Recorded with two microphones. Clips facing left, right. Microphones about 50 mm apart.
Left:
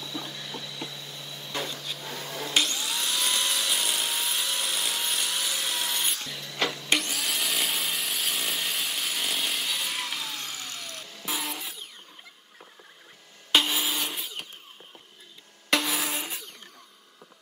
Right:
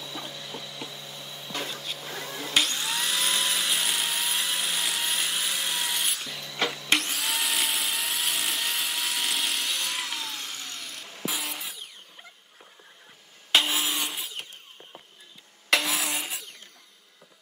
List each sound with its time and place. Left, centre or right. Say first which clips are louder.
0.0 s a sound: left 1 dB; centre
1.9 s vacuum cleaner: right 1 dB; centre
2.5 s vacuum cleaner: right 1 dB; centre
3.2 s helicopter: left 1 dB; centre
13.5 s wood: even; centre
15.7 s a sound: right 1 dB; centre